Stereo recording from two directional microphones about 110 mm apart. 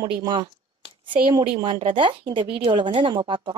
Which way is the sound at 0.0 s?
45° right (ahead or behind).